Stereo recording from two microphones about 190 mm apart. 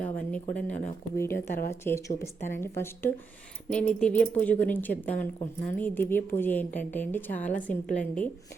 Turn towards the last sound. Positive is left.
turn(degrees=5)  # may be behind; listen again after turning